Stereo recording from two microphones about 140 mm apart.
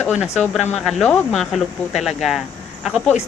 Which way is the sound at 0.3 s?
5° left (ahead or behind).